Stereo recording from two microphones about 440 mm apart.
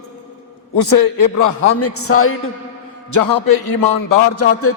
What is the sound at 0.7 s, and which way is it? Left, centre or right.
A man's voice, left.